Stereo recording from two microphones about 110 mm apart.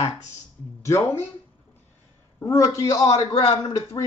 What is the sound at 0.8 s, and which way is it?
Speech, 30° left (ahead or behind).